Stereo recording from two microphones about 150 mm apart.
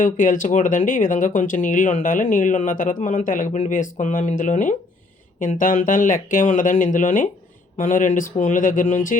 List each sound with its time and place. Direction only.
0.0 s speech: 60° left (ahead or behind)